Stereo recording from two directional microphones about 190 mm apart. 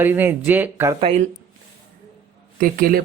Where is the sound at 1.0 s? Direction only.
30° right (ahead or behind).